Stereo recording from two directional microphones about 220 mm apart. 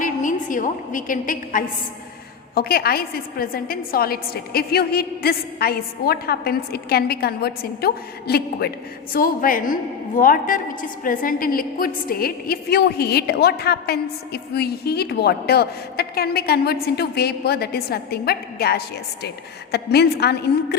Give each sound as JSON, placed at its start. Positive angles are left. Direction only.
{"t": 0.0, "sound": "a woman's voice", "side_deg": 35}